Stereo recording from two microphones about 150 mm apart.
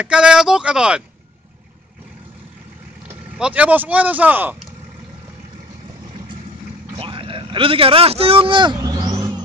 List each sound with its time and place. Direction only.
0.0 s speech: 5° right (ahead or behind)
3.3 s speech: 10° right (ahead or behind)
7.0 s speech: 35° right (ahead or behind)